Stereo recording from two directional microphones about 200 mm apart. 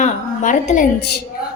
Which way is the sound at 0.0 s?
35° left (ahead or behind).